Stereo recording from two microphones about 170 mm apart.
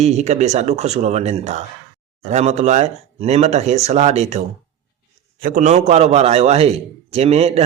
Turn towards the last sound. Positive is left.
turn(degrees=-40)  # may be behind; listen again after turning